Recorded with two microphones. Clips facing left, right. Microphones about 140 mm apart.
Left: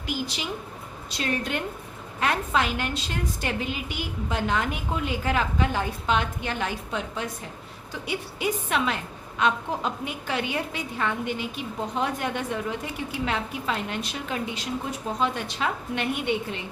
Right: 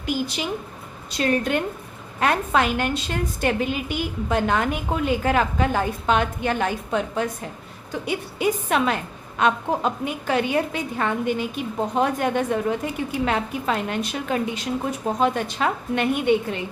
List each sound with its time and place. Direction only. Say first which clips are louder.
0.0 s a woman's voice: right 5 dB; 50° right (ahead or behind)